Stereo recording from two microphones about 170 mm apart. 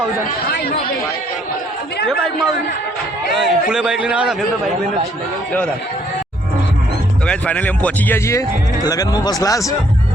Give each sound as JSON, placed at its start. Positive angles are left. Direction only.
{"t": 3.3, "sound": "a man's voice", "side_deg": 0}
{"t": 7.3, "sound": "speech", "side_deg": 5}